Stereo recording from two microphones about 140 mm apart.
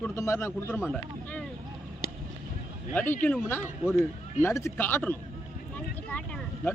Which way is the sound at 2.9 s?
15° left (ahead or behind).